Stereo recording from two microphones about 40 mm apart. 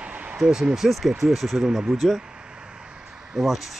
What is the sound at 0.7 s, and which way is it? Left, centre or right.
Speech, centre.